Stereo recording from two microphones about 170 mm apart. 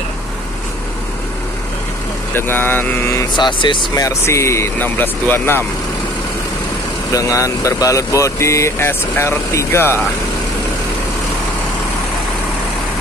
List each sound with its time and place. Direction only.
2.3 s speech: 15° left (ahead or behind)
3.3 s speech: 25° left (ahead or behind)
7.1 s speech: 20° left (ahead or behind)